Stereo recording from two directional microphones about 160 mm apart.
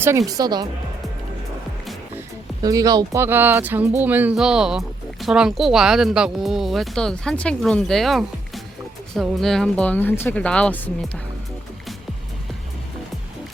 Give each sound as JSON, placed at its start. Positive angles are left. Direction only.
{"t": 0.3, "sound": "speech", "side_deg": -25}
{"t": 2.6, "sound": "speech", "side_deg": -25}